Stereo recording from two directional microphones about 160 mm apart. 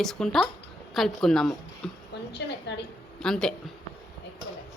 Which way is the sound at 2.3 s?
90° left.